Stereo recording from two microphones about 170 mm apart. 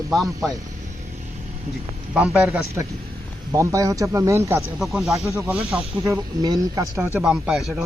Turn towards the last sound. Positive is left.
turn(degrees=-5)  # may be behind; listen again after turning